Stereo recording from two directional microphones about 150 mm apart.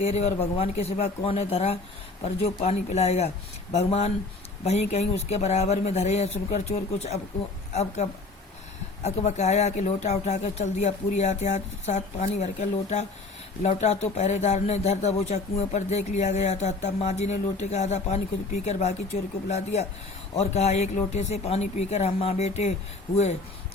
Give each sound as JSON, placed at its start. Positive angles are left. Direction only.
{"t": 0.0, "sound": "speech", "side_deg": 45}
{"t": 9.0, "sound": "speech", "side_deg": 50}